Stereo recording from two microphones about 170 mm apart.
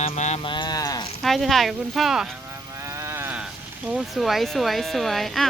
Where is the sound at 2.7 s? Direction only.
15° right (ahead or behind).